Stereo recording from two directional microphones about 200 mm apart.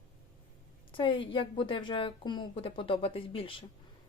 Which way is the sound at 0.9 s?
25° left (ahead or behind).